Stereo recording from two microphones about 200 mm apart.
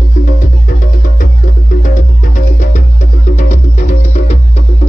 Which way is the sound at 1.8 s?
40° left (ahead or behind).